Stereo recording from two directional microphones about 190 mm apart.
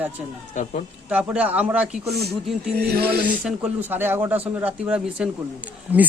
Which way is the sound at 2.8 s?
55° right (ahead or behind).